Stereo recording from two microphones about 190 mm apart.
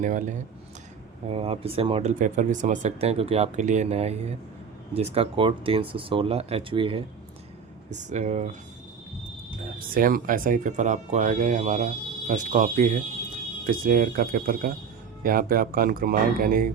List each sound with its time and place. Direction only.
0.0 s speech: 40° right (ahead or behind)
1.3 s speech: 30° right (ahead or behind)
7.9 s speech: 40° right (ahead or behind)
9.9 s speech: 45° right (ahead or behind)